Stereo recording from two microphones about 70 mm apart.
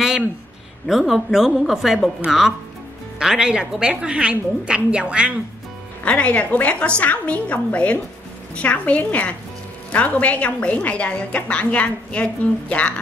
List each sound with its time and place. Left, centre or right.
0.8 s a woman's voice: centre
6.0 s a woman's voice: centre